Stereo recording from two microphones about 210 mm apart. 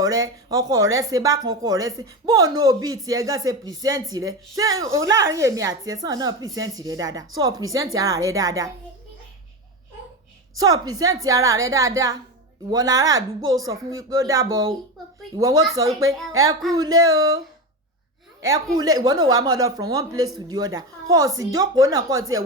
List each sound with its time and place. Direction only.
0.0 s speech: 15° right (ahead or behind)
10.6 s speech: 15° right (ahead or behind)
18.4 s speech: 15° right (ahead or behind)